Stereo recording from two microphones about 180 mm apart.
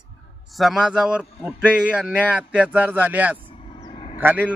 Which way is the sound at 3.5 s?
30° left (ahead or behind).